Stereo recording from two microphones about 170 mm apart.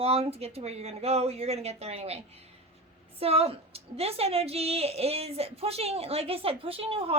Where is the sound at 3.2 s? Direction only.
35° right (ahead or behind).